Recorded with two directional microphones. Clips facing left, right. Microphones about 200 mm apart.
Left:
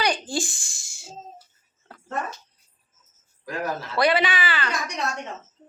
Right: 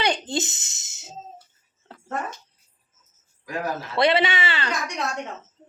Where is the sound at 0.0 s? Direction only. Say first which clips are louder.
Right 1 dB; 25° right (ahead or behind).